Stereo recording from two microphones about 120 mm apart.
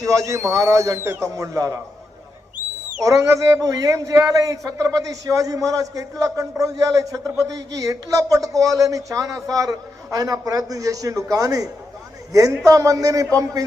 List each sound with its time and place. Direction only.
0.0 s a man's voice: 25° right (ahead or behind)
3.1 s a man's voice: 25° right (ahead or behind)